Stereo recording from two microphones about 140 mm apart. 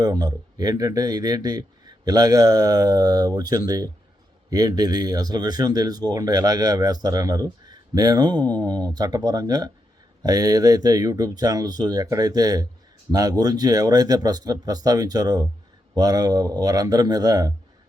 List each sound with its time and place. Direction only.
0.0 s speech: 30° right (ahead or behind)